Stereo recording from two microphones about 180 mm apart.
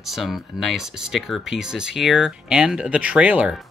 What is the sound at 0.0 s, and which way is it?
Speech, centre (ahead or behind).